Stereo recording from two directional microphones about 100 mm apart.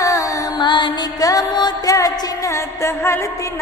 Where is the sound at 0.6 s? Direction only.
50° left (ahead or behind).